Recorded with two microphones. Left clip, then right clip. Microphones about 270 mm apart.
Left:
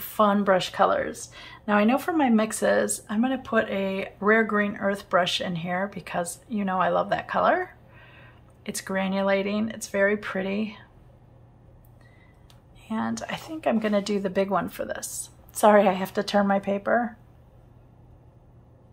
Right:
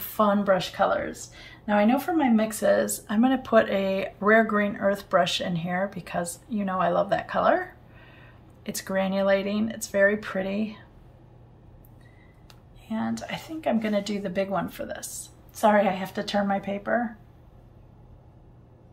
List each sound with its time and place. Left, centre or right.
0.1 s a woman's voice: centre
12.8 s speech: centre